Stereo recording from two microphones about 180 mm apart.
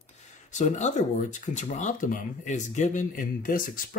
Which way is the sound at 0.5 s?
40° left (ahead or behind).